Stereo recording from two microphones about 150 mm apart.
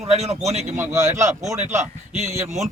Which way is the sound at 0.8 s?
20° right (ahead or behind).